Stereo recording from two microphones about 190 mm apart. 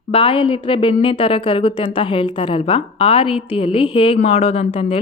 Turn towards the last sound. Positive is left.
turn(degrees=30)  # may be behind; listen again after turning